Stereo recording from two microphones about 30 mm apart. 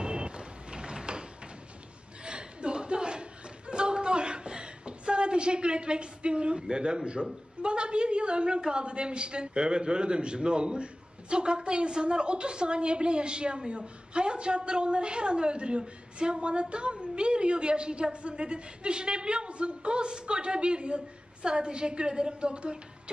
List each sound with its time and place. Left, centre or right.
0.0 s vehicle: right
2.2 s a sound: right
7.6 s a woman's voice: right